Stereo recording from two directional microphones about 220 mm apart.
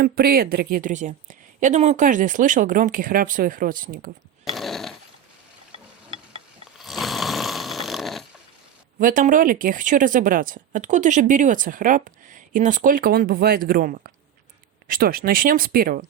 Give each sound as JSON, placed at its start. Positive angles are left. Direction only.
{"t": 0.0, "sound": "speech", "side_deg": -45}
{"t": 4.5, "sound": "neigh", "side_deg": 0}
{"t": 5.7, "sound": "a sound", "side_deg": -25}
{"t": 6.7, "sound": "snoring", "side_deg": 0}
{"t": 9.0, "sound": "speech", "side_deg": -35}